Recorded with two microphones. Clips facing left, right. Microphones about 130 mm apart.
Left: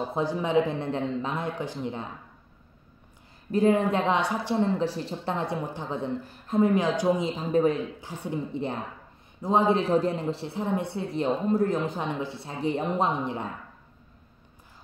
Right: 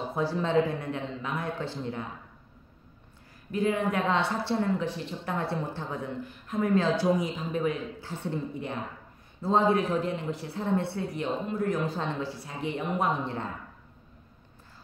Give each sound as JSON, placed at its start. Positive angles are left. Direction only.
{"t": 0.1, "sound": "speech", "side_deg": 20}
{"t": 1.6, "sound": "speech", "side_deg": 15}
{"t": 3.5, "sound": "speech", "side_deg": 35}
{"t": 4.2, "sound": "speech", "side_deg": 15}
{"t": 4.6, "sound": "speech", "side_deg": 35}
{"t": 5.3, "sound": "speech", "side_deg": 20}
{"t": 6.7, "sound": "speech", "side_deg": 15}
{"t": 8.0, "sound": "speech", "side_deg": 15}
{"t": 11.2, "sound": "speech", "side_deg": 35}